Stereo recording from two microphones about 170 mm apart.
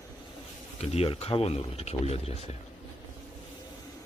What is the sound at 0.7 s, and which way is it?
Speech, 35° left (ahead or behind).